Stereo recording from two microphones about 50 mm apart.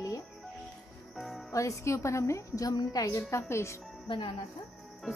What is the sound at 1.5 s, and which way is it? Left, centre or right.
Speech, left.